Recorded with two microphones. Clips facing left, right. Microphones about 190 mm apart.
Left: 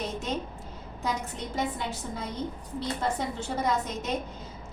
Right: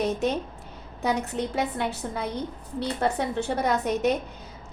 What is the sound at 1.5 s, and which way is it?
A woman's voice, 65° right (ahead or behind).